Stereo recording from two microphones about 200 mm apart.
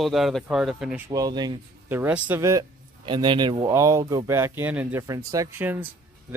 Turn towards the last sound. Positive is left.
turn(degrees=-10)  # may be behind; listen again after turning